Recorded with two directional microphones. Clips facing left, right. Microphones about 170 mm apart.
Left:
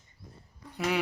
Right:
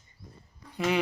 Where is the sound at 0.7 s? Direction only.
5° left (ahead or behind).